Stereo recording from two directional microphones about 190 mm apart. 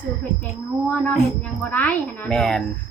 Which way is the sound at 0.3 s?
25° right (ahead or behind).